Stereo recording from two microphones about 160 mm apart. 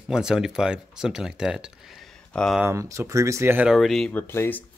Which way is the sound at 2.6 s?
15° right (ahead or behind).